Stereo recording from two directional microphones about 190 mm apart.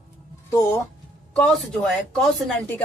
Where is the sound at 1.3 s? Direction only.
5° left (ahead or behind).